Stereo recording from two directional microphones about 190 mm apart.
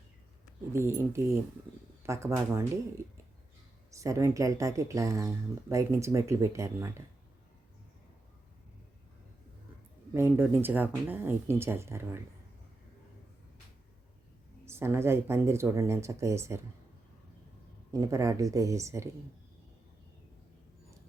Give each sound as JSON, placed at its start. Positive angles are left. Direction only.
{"t": 0.7, "sound": "speech", "side_deg": -15}
{"t": 3.9, "sound": "speech", "side_deg": -15}
{"t": 10.2, "sound": "speech", "side_deg": -15}
{"t": 14.6, "sound": "speech", "side_deg": -15}
{"t": 17.9, "sound": "speech", "side_deg": -15}